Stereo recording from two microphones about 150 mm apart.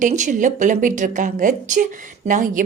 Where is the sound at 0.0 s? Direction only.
55° right (ahead or behind).